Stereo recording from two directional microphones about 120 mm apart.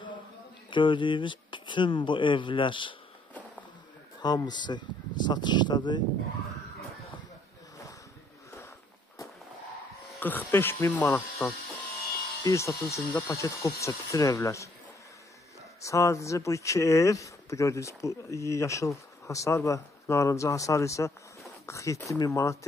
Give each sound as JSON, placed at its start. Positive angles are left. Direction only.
{"t": 0.7, "sound": "speech", "side_deg": 40}
{"t": 4.2, "sound": "speech", "side_deg": 35}
{"t": 10.2, "sound": "speech", "side_deg": 15}
{"t": 12.4, "sound": "speech", "side_deg": 25}
{"t": 15.8, "sound": "speech", "side_deg": 25}